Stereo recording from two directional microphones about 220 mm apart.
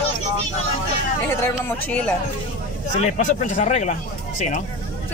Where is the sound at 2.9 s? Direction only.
30° left (ahead or behind).